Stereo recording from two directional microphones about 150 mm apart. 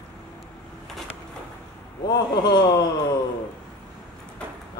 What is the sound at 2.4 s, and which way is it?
Speech, 25° left (ahead or behind).